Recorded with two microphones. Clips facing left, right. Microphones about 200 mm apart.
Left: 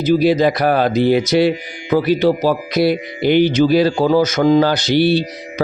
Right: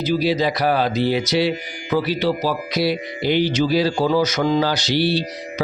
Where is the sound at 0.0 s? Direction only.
50° left (ahead or behind).